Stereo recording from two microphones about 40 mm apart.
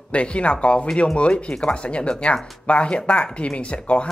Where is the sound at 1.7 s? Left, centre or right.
Left.